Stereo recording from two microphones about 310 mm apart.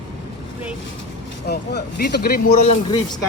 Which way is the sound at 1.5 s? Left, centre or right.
Left.